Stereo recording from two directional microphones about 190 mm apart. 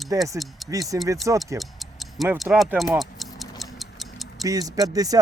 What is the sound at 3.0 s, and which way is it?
Tick-tock, centre (ahead or behind).